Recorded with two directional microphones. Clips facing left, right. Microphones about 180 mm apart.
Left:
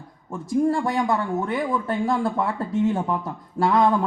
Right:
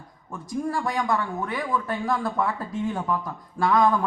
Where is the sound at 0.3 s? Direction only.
25° left (ahead or behind).